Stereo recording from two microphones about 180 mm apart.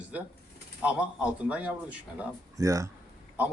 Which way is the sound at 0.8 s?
5° right (ahead or behind).